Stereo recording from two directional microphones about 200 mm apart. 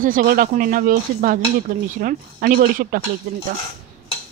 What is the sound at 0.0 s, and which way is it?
Speech, 45° right (ahead or behind).